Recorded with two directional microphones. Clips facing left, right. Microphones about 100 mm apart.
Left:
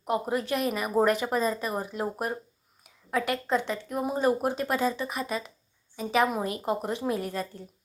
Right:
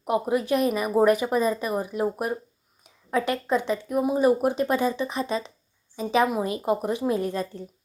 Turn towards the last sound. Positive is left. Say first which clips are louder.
# right 4 dB
turn(degrees=-25)  # may be behind; listen again after turning